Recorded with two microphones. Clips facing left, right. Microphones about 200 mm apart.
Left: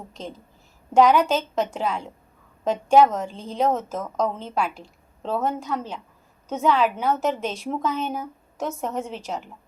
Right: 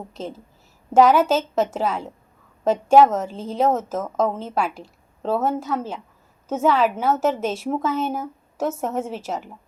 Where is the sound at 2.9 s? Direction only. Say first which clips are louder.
Right 2 dB; 5° right (ahead or behind).